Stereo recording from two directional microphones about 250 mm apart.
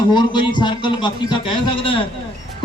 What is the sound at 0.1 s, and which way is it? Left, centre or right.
A man's voice, centre.